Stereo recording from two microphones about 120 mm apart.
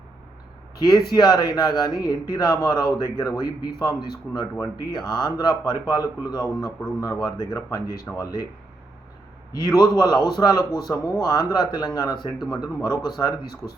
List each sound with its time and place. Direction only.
0.8 s speech: 35° left (ahead or behind)
9.5 s speech: 30° left (ahead or behind)